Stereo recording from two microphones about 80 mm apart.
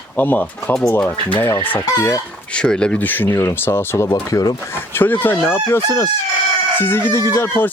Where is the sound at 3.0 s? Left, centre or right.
Left.